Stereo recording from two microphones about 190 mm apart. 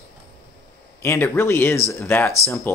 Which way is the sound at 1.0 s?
15° left (ahead or behind).